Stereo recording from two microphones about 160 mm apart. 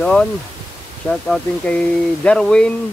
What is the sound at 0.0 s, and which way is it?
Speech, 5° left (ahead or behind).